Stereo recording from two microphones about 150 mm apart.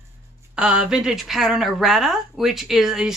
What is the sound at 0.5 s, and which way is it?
A woman's voice, 5° right (ahead or behind).